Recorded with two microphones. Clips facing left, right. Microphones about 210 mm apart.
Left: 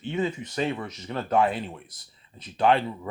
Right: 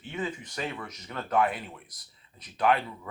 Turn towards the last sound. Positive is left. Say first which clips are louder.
# left 4 dB
turn(degrees=30)  # may be behind; listen again after turning